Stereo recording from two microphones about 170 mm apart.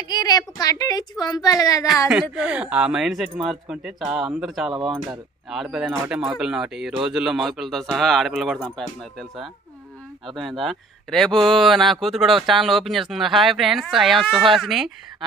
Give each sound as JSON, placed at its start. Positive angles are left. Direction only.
{"t": 0.1, "sound": "a woman's voice", "side_deg": 25}
{"t": 2.3, "sound": "speech", "side_deg": -5}